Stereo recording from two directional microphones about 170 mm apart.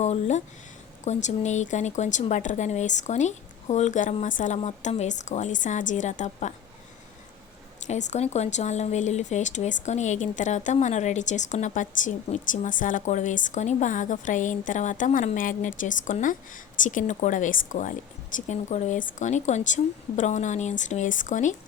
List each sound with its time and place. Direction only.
0.0 s speech: 40° left (ahead or behind)
7.9 s speech: 45° left (ahead or behind)